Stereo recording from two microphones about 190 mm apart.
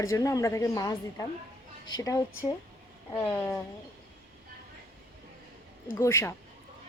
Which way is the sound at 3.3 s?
15° left (ahead or behind).